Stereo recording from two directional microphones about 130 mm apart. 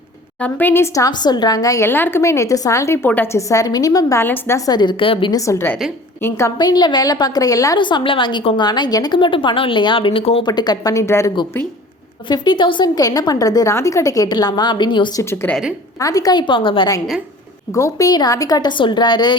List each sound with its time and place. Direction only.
0.3 s a woman's voice: 10° left (ahead or behind); by 5.4 s 40° left (ahead or behind)
5.5 s a woman's voice: 20° left (ahead or behind)
6.6 s a woman's voice: 30° left (ahead or behind)
7.8 s a woman's voice: 35° left (ahead or behind)
10.5 s a woman's voice: 30° left (ahead or behind)
12.3 s a woman's voice: 35° left (ahead or behind)
15.2 s a woman's voice: 20° left (ahead or behind); by 16.9 s 40° left (ahead or behind)
17.7 s a woman's voice: 25° left (ahead or behind)